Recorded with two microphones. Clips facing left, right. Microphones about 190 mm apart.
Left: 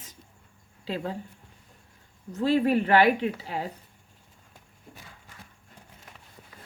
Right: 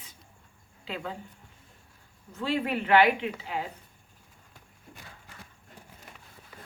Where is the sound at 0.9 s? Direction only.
35° left (ahead or behind).